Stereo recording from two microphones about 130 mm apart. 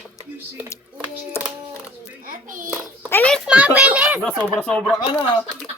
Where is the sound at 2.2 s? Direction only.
90° right.